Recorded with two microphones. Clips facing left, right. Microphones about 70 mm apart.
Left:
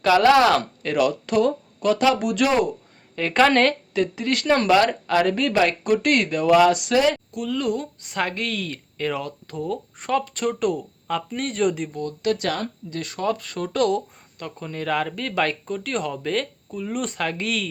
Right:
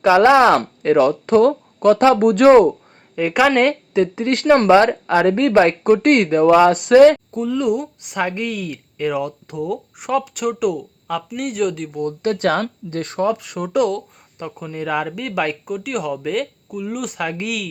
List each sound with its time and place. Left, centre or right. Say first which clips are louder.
0.0 s speech: right 4 dB; right
3.2 s speech: right 2 dB; centre
3.9 s speech: right 5 dB; right
7.4 s speech: right 5 dB; right
12.2 s speech: right 5 dB; right
13.2 s speech: right 3 dB; centre